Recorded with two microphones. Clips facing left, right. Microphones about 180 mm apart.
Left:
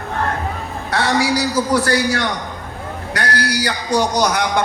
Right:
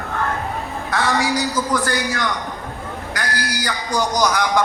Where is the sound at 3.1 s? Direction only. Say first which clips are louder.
Left 6 dB; 70° left (ahead or behind).